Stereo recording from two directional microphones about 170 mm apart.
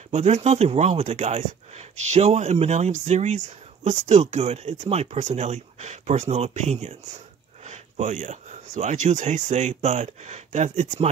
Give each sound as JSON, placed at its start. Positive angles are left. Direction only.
{"t": 0.1, "sound": "speech", "side_deg": -40}